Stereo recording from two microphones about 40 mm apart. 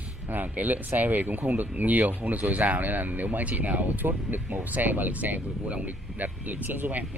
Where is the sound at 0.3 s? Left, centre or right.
Right.